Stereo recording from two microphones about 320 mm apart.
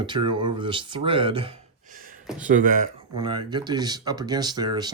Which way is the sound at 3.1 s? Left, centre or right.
Centre.